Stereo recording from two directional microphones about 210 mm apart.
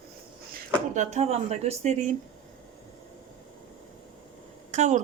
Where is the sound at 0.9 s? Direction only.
35° right (ahead or behind).